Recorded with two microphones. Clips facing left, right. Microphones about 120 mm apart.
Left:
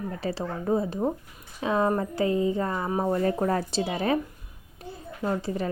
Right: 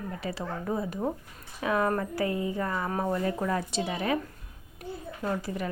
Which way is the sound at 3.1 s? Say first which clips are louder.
Left 6 dB; 35° left (ahead or behind).